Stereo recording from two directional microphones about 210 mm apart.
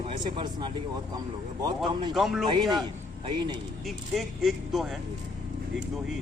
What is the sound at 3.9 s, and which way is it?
Speech, centre (ahead or behind).